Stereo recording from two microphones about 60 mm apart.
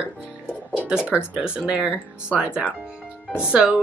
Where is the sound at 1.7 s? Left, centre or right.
Centre.